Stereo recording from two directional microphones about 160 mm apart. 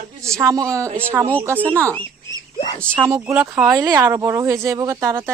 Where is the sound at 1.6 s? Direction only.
10° left (ahead or behind).